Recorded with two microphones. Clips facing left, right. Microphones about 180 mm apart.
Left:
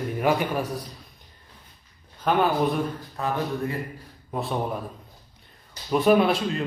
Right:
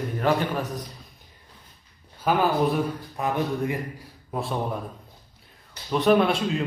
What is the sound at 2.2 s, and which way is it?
Speech, centre (ahead or behind).